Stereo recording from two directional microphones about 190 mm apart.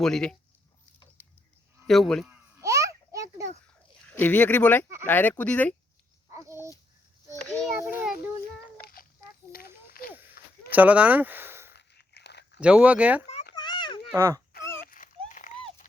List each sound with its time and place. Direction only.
0.0 s speech: 5° left (ahead or behind)
1.9 s speech: centre (ahead or behind)
2.6 s a sound: 15° right (ahead or behind)
4.1 s speech: 10° left (ahead or behind)
6.3 s dog: 15° right (ahead or behind)
7.4 s speech: 5° left (ahead or behind)
7.8 s speech: 10° right (ahead or behind)
8.8 s a sound: 50° left (ahead or behind)
10.7 s speech: 10° right (ahead or behind)
11.7 s crunch: 60° left (ahead or behind)
12.5 s speech: 5° right (ahead or behind)
13.6 s a sound: 25° left (ahead or behind)
14.1 s speech: 15° right (ahead or behind)
14.8 s a sound: 45° left (ahead or behind)